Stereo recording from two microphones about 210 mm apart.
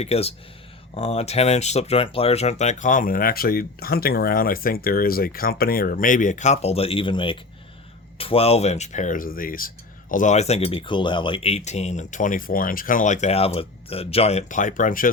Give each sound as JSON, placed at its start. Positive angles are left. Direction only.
{"t": 0.0, "sound": "speech", "side_deg": 30}